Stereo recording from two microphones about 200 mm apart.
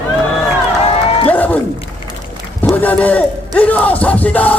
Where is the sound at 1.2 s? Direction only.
10° left (ahead or behind).